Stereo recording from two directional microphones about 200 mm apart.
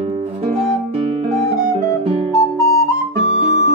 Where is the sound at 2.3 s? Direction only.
15° left (ahead or behind).